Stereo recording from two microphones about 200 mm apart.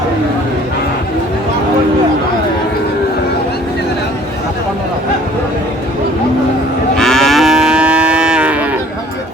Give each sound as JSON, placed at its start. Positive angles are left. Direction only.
{"t": 6.9, "sound": "moo", "side_deg": 0}